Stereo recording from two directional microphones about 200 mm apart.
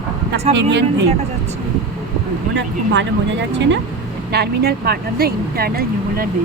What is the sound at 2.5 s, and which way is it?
Speech, 60° right (ahead or behind).